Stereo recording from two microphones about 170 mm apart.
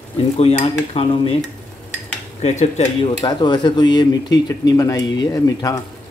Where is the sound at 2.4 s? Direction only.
40° left (ahead or behind).